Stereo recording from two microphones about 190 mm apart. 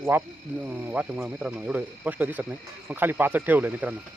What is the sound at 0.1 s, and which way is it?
Speech, 10° right (ahead or behind).